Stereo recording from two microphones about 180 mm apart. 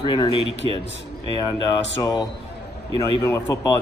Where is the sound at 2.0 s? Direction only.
20° left (ahead or behind).